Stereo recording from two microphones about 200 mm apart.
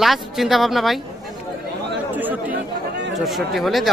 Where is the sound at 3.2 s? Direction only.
Centre (ahead or behind).